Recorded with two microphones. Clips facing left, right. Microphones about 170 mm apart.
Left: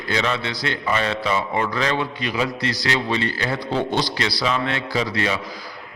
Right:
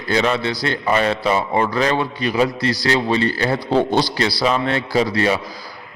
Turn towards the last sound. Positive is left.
turn(degrees=-35)  # may be behind; listen again after turning